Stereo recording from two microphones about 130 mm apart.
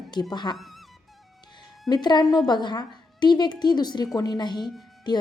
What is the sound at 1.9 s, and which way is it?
A woman's voice, 35° left (ahead or behind).